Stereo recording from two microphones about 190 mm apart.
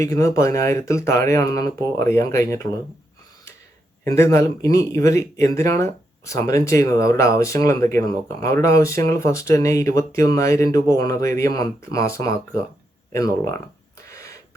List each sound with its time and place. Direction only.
0.0 s speech: 15° left (ahead or behind)
4.0 s speech: 15° left (ahead or behind)
14.1 s gasp: 15° left (ahead or behind)